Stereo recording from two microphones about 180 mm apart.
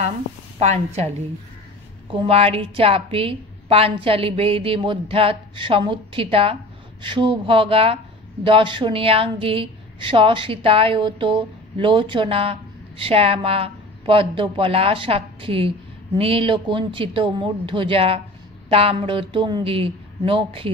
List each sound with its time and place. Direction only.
0.6 s a woman's voice: 35° right (ahead or behind)